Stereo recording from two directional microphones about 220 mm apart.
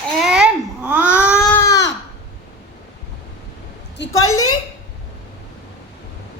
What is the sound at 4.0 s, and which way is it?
Speech, 70° left (ahead or behind).